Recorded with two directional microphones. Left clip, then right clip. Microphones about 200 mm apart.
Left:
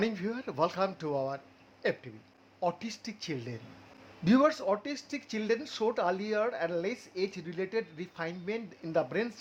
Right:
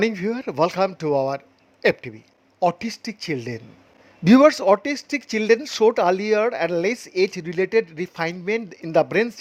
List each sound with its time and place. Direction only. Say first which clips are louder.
0.0 s speech: right 11 dB; 35° right (ahead or behind)